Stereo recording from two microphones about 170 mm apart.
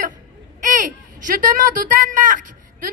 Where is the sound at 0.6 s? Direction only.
50° right (ahead or behind).